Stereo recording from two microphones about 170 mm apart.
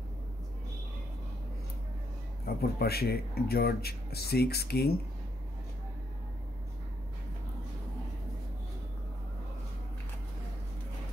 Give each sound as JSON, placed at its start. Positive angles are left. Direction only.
{"t": 2.4, "sound": "speech", "side_deg": 65}